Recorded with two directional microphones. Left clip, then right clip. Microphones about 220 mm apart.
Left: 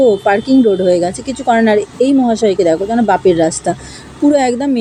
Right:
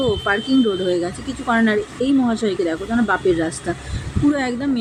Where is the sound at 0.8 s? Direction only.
15° left (ahead or behind).